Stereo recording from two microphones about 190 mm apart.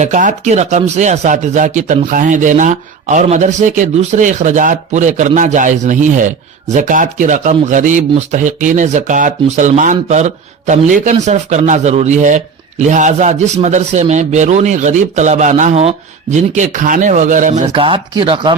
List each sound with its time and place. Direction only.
0.0 s speech: 40° right (ahead or behind)
17.8 s speech: 25° right (ahead or behind)